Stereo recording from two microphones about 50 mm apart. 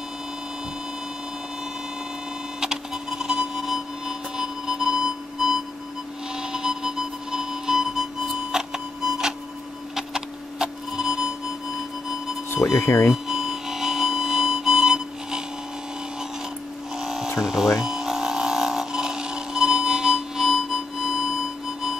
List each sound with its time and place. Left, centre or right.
2.6 s a sound: centre
6.3 s music: centre
12.6 s speech: left
13.1 s music: centre
16.9 s electric shaver: centre
17.4 s a sound: centre